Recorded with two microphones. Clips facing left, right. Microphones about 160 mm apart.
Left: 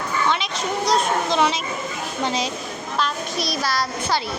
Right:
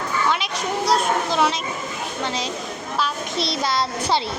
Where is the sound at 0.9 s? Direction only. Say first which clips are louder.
Even; 5° right (ahead or behind).